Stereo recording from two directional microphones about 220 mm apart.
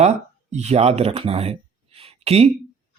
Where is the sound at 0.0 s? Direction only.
30° right (ahead or behind).